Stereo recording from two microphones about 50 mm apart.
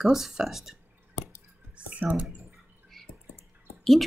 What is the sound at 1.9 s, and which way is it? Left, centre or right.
Speech, right.